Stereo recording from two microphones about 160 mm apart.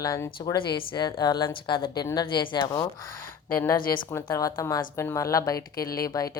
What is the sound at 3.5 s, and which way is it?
A woman's voice, 15° left (ahead or behind).